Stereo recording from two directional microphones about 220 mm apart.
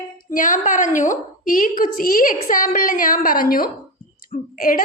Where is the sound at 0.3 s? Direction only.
35° left (ahead or behind).